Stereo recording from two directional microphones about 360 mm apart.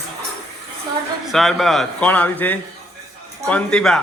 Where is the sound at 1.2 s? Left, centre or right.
Centre.